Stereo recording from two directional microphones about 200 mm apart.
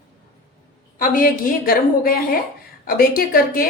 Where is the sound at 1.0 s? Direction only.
45° left (ahead or behind).